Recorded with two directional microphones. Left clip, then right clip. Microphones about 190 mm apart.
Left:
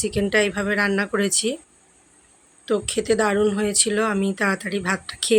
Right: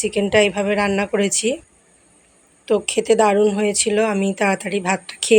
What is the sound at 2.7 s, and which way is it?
Speech, 5° right (ahead or behind).